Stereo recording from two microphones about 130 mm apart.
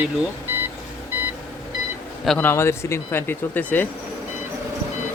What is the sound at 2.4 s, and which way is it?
Speech, 20° left (ahead or behind).